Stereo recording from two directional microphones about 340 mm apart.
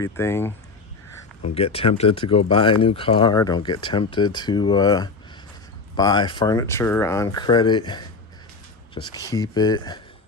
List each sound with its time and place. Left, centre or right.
0.0 s speech: centre
1.5 s speech: centre